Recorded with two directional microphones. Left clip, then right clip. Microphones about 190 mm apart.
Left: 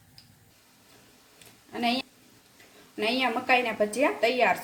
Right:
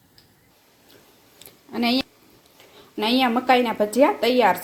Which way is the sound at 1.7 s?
45° right (ahead or behind).